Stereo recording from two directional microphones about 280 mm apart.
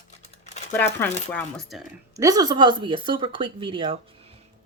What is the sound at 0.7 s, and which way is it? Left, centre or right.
Speech, centre.